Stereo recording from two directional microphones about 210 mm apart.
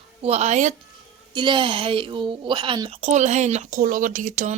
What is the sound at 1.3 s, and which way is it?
Speech, 20° right (ahead or behind).